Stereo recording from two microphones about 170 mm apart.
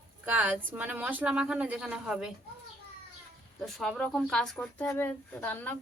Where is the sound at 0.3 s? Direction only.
10° right (ahead or behind).